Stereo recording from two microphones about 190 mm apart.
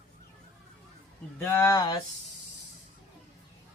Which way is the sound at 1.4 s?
15° left (ahead or behind).